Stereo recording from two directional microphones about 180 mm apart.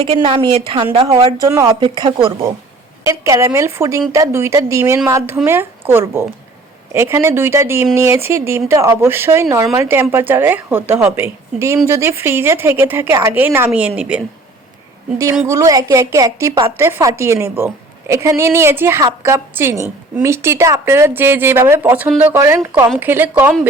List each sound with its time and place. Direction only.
0.0 s a woman's voice: 30° right (ahead or behind); by 14.2 s 5° right (ahead or behind)
15.4 s a woman's voice: 20° right (ahead or behind)